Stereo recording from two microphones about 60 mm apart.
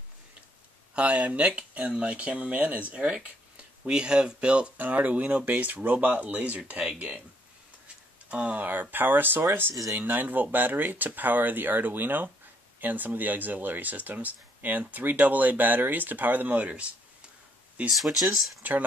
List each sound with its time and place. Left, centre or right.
0.9 s speech: centre
8.3 s speech: right
17.8 s speech: centre
18.6 s speech: right